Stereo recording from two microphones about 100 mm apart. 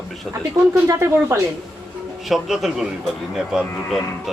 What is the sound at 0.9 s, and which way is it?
Speech, 30° right (ahead or behind).